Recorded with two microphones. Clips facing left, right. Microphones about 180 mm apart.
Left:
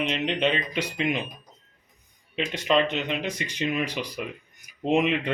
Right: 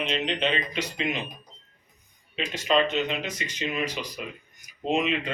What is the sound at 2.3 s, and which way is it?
Speech, 60° left (ahead or behind).